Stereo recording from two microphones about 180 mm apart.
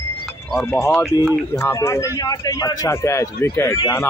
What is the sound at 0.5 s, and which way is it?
A man's voice, 10° left (ahead or behind).